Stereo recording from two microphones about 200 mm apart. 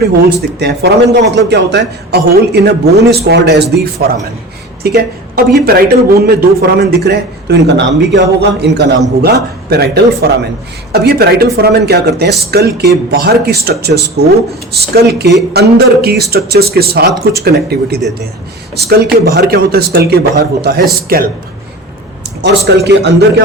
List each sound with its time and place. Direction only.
0.6 s a man's voice: 55° right (ahead or behind)
22.4 s a man's voice: 55° right (ahead or behind)